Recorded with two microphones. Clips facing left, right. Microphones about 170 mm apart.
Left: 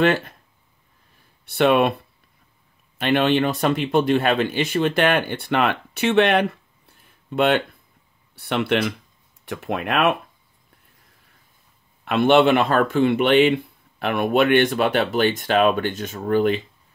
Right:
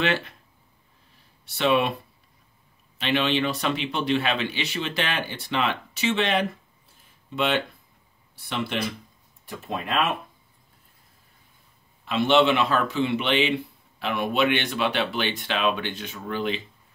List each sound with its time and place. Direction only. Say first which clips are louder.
0.0 s speech: left 7 dB; 45° left (ahead or behind)
1.4 s speech: left 5 dB; 55° left (ahead or behind)
3.0 s speech: left 5 dB; 50° left (ahead or behind)
12.0 s speech: left 4 dB; 60° left (ahead or behind)